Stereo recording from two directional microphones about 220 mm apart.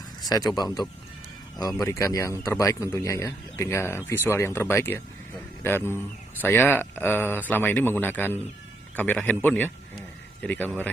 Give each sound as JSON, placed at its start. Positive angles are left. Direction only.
{"t": 0.2, "sound": "speech", "side_deg": 15}